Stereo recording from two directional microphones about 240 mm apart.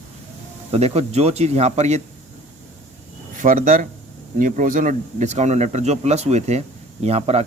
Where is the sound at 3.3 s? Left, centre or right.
Right.